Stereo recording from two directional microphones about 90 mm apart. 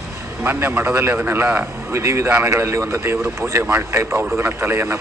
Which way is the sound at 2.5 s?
35° right (ahead or behind).